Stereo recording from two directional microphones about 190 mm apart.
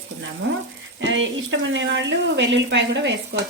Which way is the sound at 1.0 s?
80° right.